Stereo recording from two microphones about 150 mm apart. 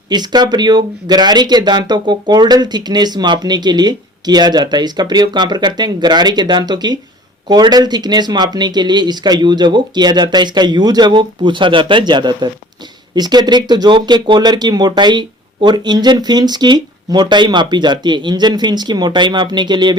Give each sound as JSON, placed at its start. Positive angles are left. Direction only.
{"t": 0.1, "sound": "speech", "side_deg": -30}